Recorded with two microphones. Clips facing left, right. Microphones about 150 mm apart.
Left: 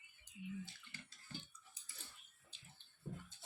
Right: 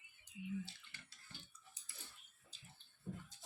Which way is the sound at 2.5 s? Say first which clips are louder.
Right 4 dB; 35° right (ahead or behind).